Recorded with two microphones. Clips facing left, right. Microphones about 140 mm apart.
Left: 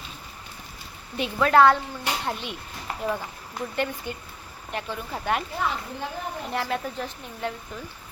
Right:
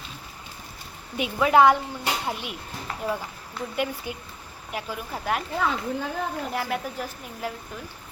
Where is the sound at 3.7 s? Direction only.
10° right (ahead or behind).